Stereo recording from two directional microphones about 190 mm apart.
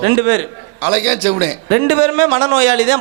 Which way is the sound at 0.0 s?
15° right (ahead or behind).